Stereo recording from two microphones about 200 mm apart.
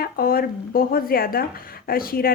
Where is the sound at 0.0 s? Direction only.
50° left (ahead or behind).